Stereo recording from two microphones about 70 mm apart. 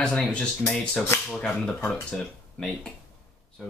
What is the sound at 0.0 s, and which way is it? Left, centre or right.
Speech, centre.